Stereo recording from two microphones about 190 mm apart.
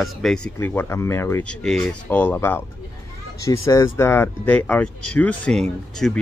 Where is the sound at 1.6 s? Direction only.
Centre (ahead or behind).